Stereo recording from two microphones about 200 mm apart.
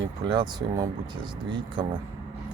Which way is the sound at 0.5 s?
20° right (ahead or behind).